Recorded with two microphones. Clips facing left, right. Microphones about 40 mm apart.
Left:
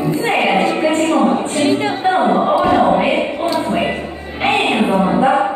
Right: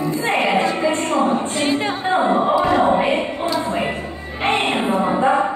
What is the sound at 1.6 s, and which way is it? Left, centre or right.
A capella, centre.